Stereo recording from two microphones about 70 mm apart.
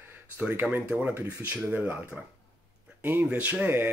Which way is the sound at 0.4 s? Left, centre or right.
Right.